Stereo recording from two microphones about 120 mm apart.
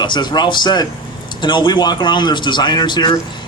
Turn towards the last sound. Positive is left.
turn(degrees=40)  # may be behind; listen again after turning